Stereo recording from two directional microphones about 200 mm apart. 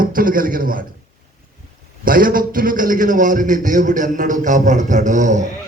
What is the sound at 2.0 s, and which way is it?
A man's voice, 45° right (ahead or behind).